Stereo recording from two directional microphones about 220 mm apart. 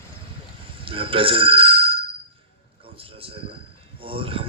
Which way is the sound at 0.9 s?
25° right (ahead or behind).